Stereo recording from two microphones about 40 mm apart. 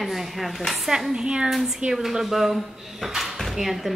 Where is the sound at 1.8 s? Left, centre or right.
Right.